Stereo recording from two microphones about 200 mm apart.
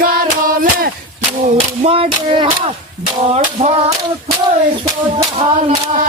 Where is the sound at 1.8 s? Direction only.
30° right (ahead or behind).